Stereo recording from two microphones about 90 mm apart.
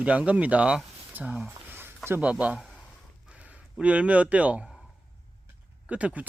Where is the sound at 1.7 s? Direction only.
25° right (ahead or behind).